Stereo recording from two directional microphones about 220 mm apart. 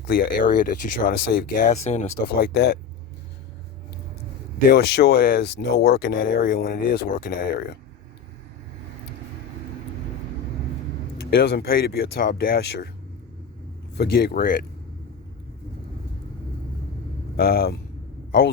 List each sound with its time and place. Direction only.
0.1 s speech: 40° left (ahead or behind)
2.3 s speech: 45° left (ahead or behind)
4.7 s speech: 50° left (ahead or behind)
11.3 s speech: 45° left (ahead or behind)
13.9 s speech: 45° left (ahead or behind)
17.3 s speech: 45° left (ahead or behind)